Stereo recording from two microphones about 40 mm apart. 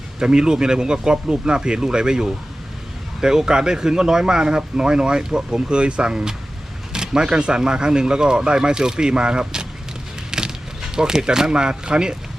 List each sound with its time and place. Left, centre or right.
0.2 s speech: centre
10.3 s a sound: centre
10.9 s speech: centre